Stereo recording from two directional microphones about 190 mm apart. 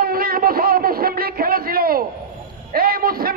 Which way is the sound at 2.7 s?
50° right (ahead or behind).